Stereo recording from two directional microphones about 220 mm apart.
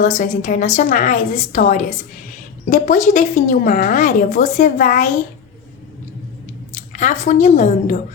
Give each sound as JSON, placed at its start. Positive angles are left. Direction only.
{"t": 0.0, "sound": "a woman's voice", "side_deg": 35}
{"t": 6.7, "sound": "speech", "side_deg": 35}